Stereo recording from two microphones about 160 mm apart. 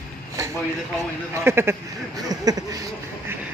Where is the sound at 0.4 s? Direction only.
20° right (ahead or behind).